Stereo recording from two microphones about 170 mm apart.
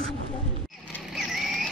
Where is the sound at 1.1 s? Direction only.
Centre (ahead or behind).